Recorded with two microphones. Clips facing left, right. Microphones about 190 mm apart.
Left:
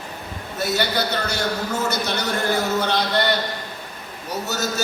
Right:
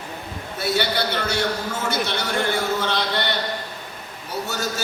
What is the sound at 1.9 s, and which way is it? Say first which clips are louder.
A man's voice: even; 40° left (ahead or behind).